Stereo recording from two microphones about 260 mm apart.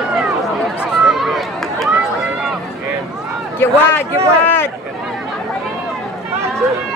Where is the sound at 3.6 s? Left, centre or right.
Centre.